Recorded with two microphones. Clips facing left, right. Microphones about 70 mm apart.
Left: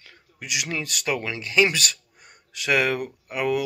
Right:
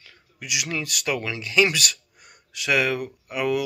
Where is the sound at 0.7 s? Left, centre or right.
Left.